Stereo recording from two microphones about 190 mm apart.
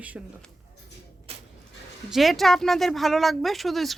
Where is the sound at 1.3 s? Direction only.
30° right (ahead or behind).